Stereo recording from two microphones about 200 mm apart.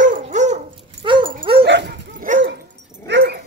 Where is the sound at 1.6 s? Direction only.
60° right (ahead or behind).